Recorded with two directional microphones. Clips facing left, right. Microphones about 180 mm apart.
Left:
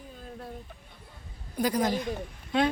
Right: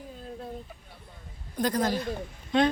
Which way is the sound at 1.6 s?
10° left (ahead or behind).